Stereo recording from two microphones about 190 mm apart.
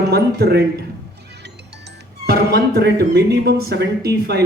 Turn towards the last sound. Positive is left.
turn(degrees=-60)  # may be behind; listen again after turning